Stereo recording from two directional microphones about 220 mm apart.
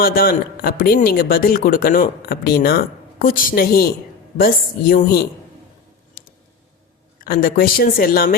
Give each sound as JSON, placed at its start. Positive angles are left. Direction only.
{"t": 0.0, "sound": "speech", "side_deg": 40}
{"t": 7.3, "sound": "speech", "side_deg": 40}